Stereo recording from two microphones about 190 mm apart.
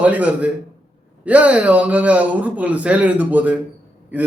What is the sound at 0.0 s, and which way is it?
A man's voice, 10° right (ahead or behind).